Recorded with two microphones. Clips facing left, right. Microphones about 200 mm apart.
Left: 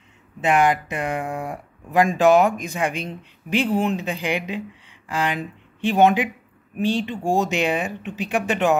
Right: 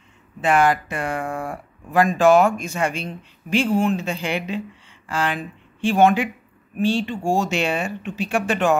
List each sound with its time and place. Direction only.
0.4 s speech: 15° left (ahead or behind)